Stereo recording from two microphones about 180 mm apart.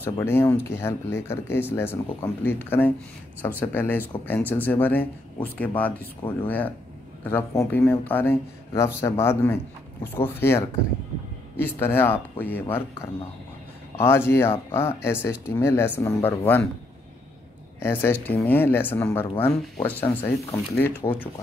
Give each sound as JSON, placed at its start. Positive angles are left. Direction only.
{"t": 0.0, "sound": "speech", "side_deg": 10}
{"t": 17.7, "sound": "speech", "side_deg": 15}
{"t": 21.0, "sound": "speech", "side_deg": 20}